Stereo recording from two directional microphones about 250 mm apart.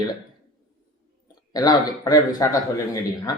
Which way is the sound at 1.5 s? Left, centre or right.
Centre.